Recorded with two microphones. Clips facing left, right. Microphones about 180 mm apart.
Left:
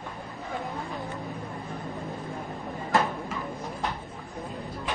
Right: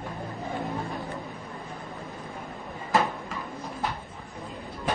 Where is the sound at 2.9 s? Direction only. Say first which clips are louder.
Even; centre (ahead or behind).